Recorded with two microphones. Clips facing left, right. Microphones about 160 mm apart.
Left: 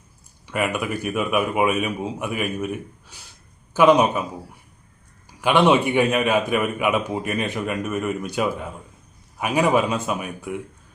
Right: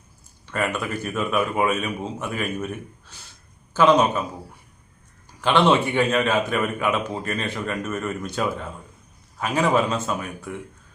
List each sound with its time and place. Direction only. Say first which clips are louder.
0.4 s a man's voice: left 2 dB; 15° left (ahead or behind)
3.1 s a sound: even; 10° left (ahead or behind)
3.8 s a man's voice: left 2 dB; 15° left (ahead or behind)
5.4 s a man's voice: left 1 dB; 10° left (ahead or behind)